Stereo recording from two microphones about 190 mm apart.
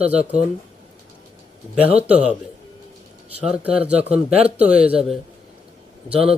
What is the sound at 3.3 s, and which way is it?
Speech, 5° right (ahead or behind).